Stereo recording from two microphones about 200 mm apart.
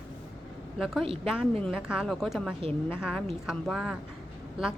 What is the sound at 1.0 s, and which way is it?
Speech, 25° right (ahead or behind).